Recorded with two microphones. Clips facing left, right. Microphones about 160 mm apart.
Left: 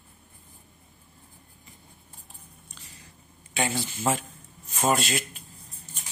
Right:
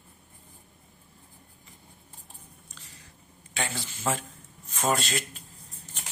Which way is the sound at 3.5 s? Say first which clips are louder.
Left 5 dB; 15° left (ahead or behind).